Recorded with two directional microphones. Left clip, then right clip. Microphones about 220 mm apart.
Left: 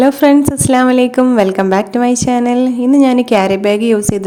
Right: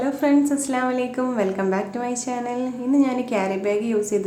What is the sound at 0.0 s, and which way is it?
A woman's voice, 45° left (ahead or behind).